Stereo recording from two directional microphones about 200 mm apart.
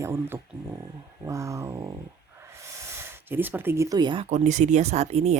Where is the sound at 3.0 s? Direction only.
10° right (ahead or behind).